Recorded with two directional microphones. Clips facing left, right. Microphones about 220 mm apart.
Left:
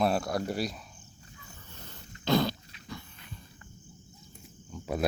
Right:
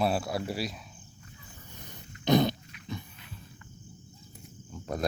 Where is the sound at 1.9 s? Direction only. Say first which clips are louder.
Right 3 dB; 20° right (ahead or behind).